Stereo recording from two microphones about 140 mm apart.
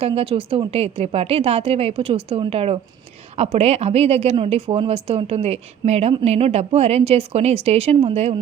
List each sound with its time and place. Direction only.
0.0 s speech: 45° right (ahead or behind)